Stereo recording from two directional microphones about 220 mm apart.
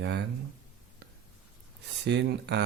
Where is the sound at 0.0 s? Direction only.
50° right (ahead or behind).